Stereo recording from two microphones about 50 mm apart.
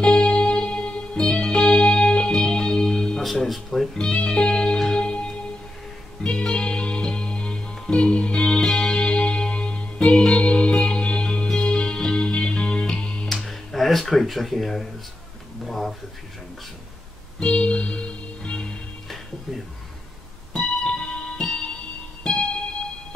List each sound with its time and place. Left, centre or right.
0.0 s music: centre
3.4 s speech: centre
4.0 s music: left
13.5 s a sound: centre
17.4 s music: left
20.5 s music: left